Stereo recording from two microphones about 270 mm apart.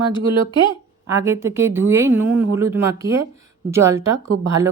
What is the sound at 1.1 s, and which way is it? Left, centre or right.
Speech, centre.